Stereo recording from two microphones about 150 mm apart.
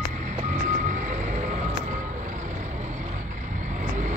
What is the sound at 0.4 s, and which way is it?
Vehicle, 60° right (ahead or behind).